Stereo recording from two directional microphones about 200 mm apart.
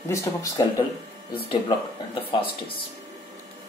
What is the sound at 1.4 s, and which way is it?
Speech, 25° left (ahead or behind).